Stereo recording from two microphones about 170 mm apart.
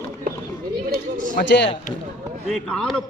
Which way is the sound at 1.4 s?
90° left.